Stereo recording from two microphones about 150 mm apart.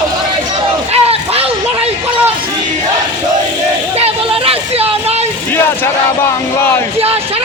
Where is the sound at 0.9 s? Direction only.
40° right (ahead or behind).